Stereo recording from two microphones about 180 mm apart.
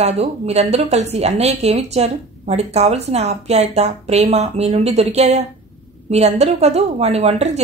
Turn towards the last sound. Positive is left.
turn(degrees=-35)  # may be behind; listen again after turning